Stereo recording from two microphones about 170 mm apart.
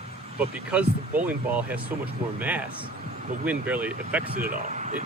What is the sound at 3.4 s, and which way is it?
Speech, 10° right (ahead or behind).